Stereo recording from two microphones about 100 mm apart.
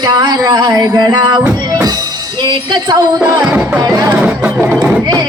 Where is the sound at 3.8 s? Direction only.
35° right (ahead or behind).